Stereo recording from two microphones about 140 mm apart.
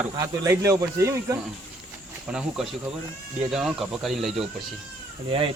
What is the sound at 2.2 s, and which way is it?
Speech, 5° right (ahead or behind).